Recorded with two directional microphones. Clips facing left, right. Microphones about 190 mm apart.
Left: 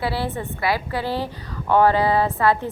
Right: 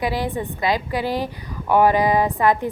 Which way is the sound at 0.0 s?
15° right (ahead or behind).